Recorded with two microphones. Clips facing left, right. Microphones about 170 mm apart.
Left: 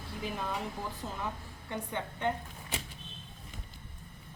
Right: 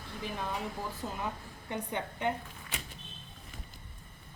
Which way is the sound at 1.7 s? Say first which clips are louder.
Right 1 dB; 15° right (ahead or behind).